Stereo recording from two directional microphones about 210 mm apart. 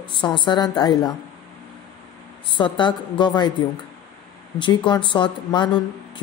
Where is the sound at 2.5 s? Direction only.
20° left (ahead or behind).